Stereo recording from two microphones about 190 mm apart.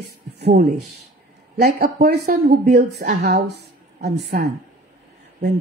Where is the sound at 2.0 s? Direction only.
60° right (ahead or behind).